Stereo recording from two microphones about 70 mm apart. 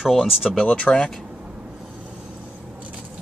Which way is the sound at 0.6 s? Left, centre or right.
Centre.